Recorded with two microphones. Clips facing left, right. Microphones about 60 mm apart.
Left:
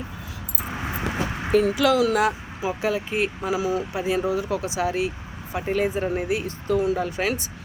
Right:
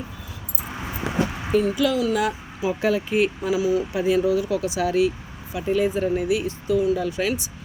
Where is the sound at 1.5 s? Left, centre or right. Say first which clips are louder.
Left 3 dB; left.